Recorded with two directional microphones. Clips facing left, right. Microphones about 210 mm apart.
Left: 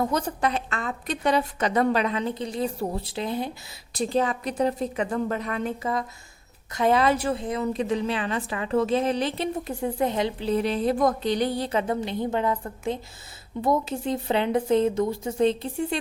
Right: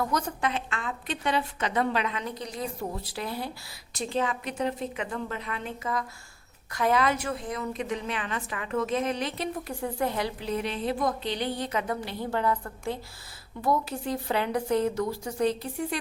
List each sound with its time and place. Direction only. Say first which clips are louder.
0.0 s a woman's voice: left 4 dB; 30° left (ahead or behind)
3.9 s a woman's voice: left 5 dB; 40° left (ahead or behind)
6.7 s a woman's voice: left 4 dB; 25° left (ahead or behind)